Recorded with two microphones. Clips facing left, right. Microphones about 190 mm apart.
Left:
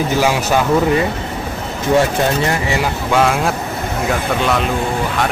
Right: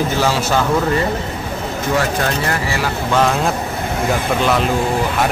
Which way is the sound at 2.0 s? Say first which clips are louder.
Left 5 dB; 25° left (ahead or behind).